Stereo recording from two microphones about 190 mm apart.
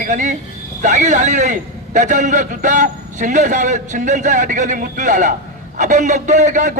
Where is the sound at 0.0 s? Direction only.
40° right (ahead or behind).